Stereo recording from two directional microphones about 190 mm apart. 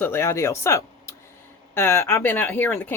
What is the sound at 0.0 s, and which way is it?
Speech, 15° left (ahead or behind).